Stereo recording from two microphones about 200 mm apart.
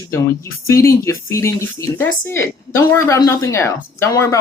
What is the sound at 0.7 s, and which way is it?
Speech, 15° left (ahead or behind).